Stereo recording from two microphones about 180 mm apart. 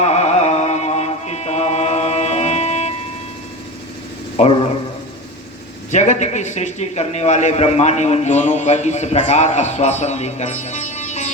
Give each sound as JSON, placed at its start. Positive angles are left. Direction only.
{"t": 0.0, "sound": "music", "side_deg": 40}
{"t": 4.4, "sound": "a man's voice", "side_deg": 40}
{"t": 5.9, "sound": "a man's voice", "side_deg": 40}